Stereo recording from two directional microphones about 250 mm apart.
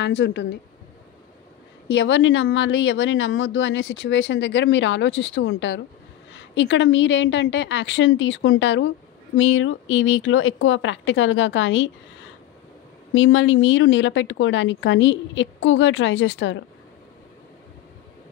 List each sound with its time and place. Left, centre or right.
0.0 s a woman's voice: left
1.9 s a woman's voice: left
13.1 s a woman's voice: left